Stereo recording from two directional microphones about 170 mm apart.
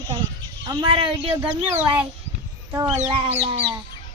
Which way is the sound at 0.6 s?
30° right (ahead or behind).